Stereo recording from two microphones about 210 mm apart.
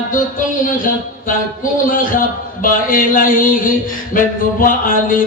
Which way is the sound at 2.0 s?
40° left (ahead or behind).